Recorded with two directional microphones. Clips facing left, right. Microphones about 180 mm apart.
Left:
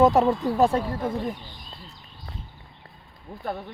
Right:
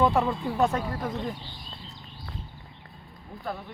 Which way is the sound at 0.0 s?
40° left (ahead or behind).